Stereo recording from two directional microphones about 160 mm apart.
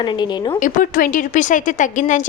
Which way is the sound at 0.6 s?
55° left (ahead or behind).